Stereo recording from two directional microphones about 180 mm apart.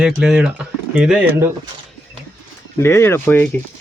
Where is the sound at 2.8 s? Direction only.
15° left (ahead or behind).